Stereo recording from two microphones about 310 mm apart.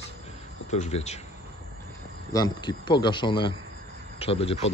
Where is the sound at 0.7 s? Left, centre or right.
Left.